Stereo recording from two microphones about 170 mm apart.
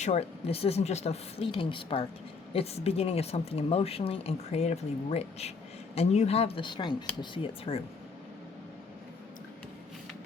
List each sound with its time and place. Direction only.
0.0 s speech: 40° left (ahead or behind)